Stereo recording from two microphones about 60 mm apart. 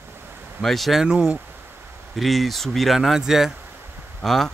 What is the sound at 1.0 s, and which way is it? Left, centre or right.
Speech, centre.